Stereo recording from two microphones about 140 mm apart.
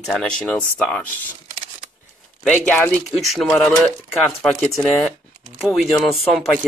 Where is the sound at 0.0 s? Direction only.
5° left (ahead or behind).